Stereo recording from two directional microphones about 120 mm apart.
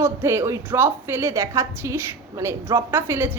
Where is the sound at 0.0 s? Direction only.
20° right (ahead or behind).